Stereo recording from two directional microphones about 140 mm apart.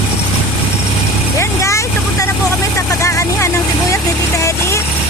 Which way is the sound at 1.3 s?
20° left (ahead or behind).